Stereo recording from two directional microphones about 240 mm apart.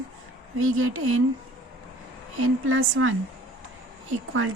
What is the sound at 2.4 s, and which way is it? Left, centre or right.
Speech, right.